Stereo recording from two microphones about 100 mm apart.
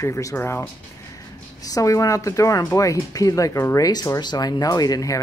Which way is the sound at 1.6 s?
35° left (ahead or behind).